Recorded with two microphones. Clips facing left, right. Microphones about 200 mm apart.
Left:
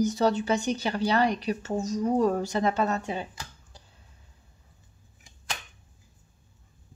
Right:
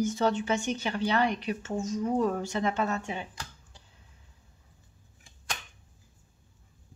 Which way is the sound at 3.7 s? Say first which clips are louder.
Left 4 dB; 40° left (ahead or behind).